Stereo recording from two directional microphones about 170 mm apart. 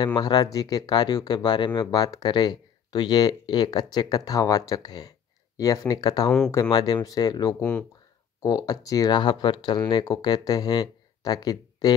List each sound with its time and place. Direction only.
0.0 s speech: 25° left (ahead or behind)